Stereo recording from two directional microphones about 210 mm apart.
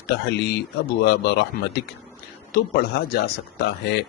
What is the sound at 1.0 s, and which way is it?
Speech, 55° left (ahead or behind).